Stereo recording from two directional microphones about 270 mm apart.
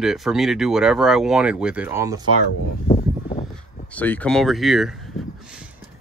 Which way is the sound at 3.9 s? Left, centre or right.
Centre.